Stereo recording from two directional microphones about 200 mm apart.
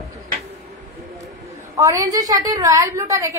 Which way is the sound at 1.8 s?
15° right (ahead or behind).